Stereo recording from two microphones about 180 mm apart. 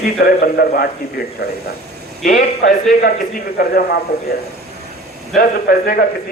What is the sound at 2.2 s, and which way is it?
A man's voice, 55° left (ahead or behind).